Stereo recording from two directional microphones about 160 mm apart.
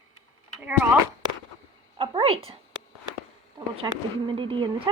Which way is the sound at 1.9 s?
30° right (ahead or behind).